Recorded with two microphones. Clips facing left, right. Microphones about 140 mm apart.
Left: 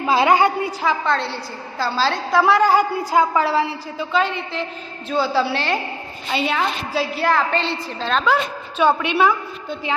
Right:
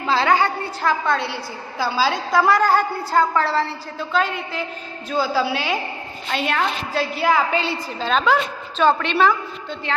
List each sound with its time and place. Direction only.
0.0 s a woman's voice: 20° left (ahead or behind)
0.8 s a woman's voice: centre (ahead or behind)
2.3 s a woman's voice: 5° left (ahead or behind)
8.8 s a woman's voice: 10° left (ahead or behind)